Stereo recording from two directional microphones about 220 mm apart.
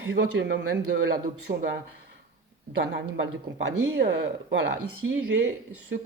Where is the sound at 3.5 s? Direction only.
50° right (ahead or behind).